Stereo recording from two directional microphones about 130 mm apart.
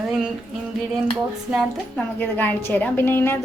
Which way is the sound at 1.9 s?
15° left (ahead or behind).